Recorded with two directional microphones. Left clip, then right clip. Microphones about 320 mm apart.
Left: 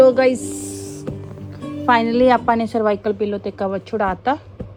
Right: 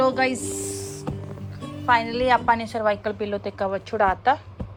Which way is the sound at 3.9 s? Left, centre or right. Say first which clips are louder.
Even; centre.